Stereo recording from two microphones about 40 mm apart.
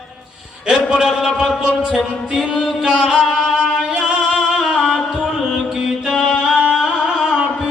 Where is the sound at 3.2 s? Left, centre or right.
Centre.